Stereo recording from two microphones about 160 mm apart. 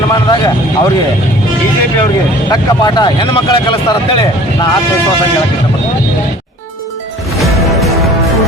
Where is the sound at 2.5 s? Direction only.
25° left (ahead or behind).